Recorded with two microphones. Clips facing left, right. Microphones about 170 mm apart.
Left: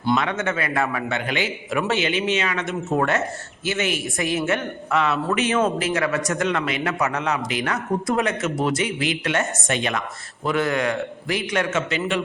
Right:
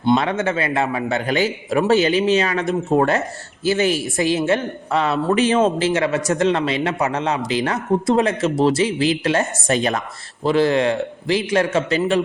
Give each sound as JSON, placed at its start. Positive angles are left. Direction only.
{"t": 0.0, "sound": "a man's voice", "side_deg": -30}